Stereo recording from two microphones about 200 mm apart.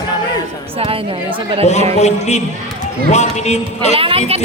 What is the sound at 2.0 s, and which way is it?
Speech, 35° left (ahead or behind).